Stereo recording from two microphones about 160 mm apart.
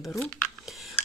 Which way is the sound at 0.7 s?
Centre (ahead or behind).